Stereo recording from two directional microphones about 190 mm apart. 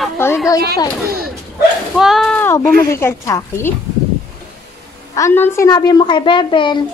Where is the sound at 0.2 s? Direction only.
10° left (ahead or behind).